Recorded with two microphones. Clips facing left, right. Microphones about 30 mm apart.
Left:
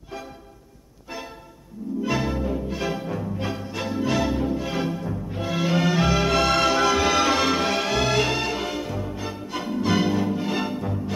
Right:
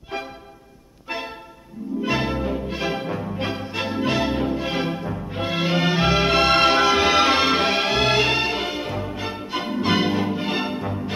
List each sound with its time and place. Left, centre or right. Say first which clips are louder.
1.0 s music: right 6 dB; right
2.0 s music: right 2 dB; right